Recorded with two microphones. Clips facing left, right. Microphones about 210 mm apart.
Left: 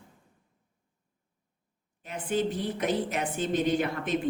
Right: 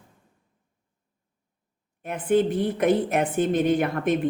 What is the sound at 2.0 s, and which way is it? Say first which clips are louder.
A woman's voice: right 7 dB; 55° right (ahead or behind).